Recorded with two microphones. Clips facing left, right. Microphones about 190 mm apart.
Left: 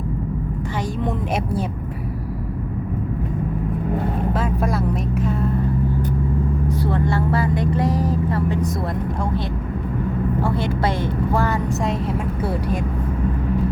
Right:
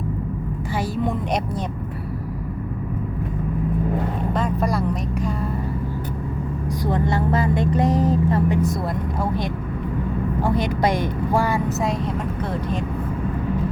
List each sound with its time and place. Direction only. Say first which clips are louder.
4.4 s music: even; 5° left (ahead or behind)
6.7 s speech: right 2 dB; 15° right (ahead or behind)
10.4 s a woman's voice: right 4 dB; 15° right (ahead or behind)
11.9 s speech: left 1 dB; 5° left (ahead or behind)